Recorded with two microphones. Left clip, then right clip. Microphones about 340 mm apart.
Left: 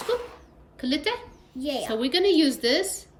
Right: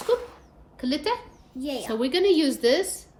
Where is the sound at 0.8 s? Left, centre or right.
Centre.